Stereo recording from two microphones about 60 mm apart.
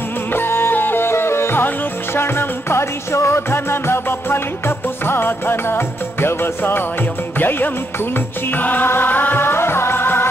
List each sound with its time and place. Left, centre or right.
0.3 s music: left